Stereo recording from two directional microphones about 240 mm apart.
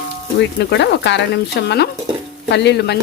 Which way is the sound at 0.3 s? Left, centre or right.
Left.